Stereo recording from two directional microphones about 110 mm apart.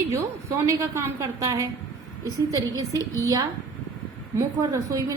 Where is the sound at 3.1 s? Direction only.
30° right (ahead or behind).